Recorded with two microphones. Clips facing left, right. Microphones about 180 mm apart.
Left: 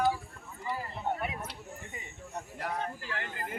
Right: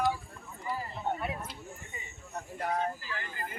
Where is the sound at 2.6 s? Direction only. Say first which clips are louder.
Right 4 dB; 70° left (ahead or behind).